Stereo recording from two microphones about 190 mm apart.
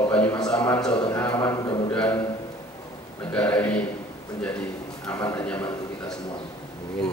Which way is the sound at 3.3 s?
10° left (ahead or behind).